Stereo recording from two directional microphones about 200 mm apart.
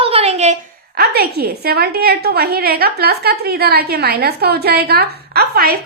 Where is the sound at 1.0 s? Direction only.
50° right (ahead or behind).